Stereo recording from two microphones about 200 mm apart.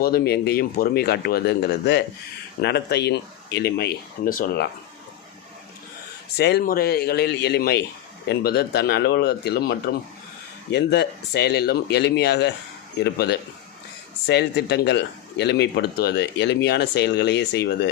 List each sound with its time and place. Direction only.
0.0 s speech: 50° left (ahead or behind)
6.3 s speech: 55° left (ahead or behind)
14.3 s speech: 55° left (ahead or behind)